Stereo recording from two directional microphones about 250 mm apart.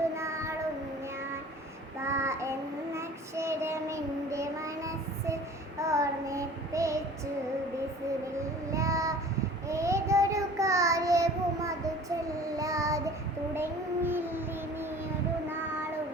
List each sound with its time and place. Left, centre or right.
0.2 s child singing: centre
2.0 s child singing: centre
8.4 s child singing: centre
13.5 s a sound: centre